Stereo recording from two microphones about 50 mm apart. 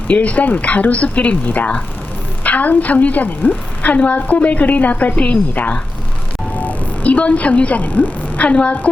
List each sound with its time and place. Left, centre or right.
0.1 s a woman's voice: left
6.5 s vehicle: left
7.8 s a woman's voice: left